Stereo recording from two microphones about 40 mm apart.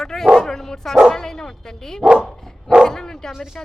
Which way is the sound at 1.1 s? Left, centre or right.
Centre.